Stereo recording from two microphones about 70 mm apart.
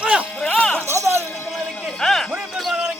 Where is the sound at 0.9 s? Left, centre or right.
Right.